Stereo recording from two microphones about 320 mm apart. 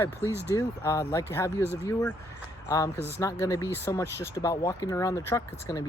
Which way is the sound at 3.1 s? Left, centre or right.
Centre.